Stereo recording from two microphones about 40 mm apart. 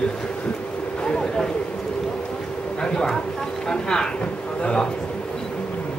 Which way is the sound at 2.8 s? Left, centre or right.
Centre.